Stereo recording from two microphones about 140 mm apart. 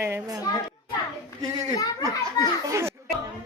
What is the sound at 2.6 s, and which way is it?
Speech, 20° right (ahead or behind).